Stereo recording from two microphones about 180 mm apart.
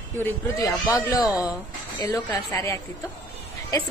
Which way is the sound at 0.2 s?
15° left (ahead or behind).